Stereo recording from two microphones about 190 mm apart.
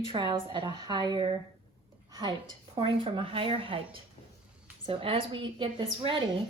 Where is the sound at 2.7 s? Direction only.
25° right (ahead or behind).